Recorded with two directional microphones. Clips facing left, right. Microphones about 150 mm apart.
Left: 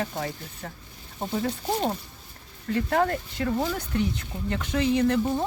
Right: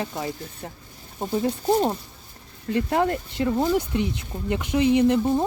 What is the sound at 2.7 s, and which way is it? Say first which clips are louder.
Speech: right 2 dB; 20° right (ahead or behind).